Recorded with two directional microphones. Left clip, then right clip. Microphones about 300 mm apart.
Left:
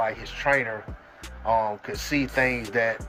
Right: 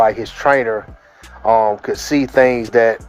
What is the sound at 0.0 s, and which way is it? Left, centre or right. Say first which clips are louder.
Speech: right 12 dB; centre.